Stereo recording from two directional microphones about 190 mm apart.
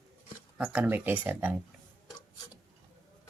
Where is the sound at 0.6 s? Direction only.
10° right (ahead or behind).